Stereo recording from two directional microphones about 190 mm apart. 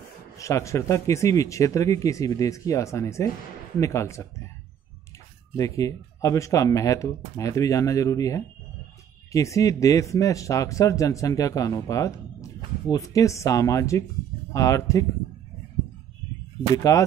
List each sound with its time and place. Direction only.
0.4 s speech: 15° left (ahead or behind)
5.6 s speech: 15° left (ahead or behind)
16.7 s speech: 15° left (ahead or behind)